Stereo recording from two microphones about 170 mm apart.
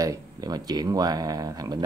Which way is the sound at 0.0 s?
20° right (ahead or behind).